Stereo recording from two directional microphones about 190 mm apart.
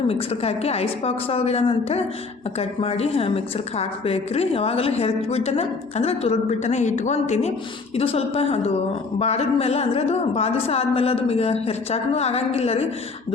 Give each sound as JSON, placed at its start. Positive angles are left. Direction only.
{"t": 0.1, "sound": "a woman's voice", "side_deg": 30}